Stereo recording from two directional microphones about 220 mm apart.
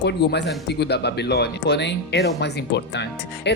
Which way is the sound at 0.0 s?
50° left (ahead or behind).